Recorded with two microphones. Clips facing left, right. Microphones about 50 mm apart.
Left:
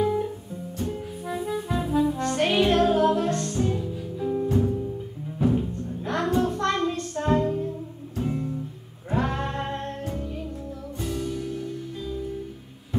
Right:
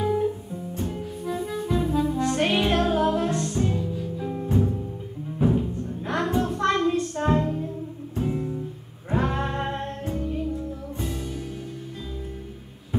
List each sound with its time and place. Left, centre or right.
0.0 s guitar: centre
1.3 s music: centre
4.3 s music: centre
5.6 s music: centre